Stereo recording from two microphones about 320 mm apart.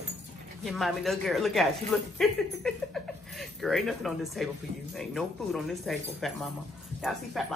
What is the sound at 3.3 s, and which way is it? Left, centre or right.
Speech, centre.